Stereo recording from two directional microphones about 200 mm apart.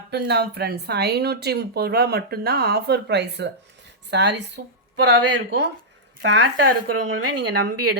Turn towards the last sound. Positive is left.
turn(degrees=-60)  # may be behind; listen again after turning